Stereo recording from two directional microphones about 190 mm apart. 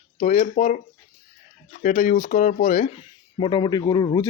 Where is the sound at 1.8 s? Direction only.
40° left (ahead or behind).